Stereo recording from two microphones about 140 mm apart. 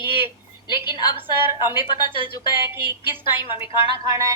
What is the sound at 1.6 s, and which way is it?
A woman's voice, 35° left (ahead or behind).